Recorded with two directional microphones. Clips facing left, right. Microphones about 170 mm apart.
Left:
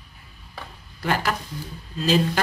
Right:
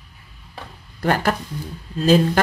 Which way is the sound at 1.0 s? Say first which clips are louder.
Right 5 dB; 50° right (ahead or behind).